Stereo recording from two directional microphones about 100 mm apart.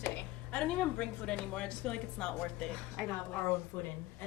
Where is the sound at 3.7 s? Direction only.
20° left (ahead or behind).